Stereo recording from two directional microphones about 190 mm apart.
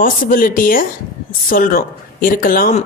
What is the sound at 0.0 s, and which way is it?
A woman's voice, 45° left (ahead or behind).